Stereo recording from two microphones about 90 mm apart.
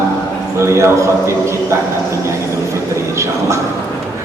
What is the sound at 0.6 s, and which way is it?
Speech, 30° right (ahead or behind).